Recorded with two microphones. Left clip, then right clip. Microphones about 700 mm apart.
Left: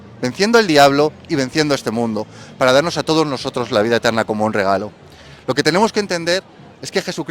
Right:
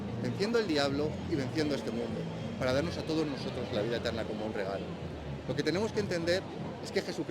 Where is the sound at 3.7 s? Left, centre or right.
Left.